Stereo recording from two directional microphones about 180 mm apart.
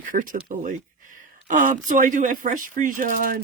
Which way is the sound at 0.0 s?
50° right (ahead or behind).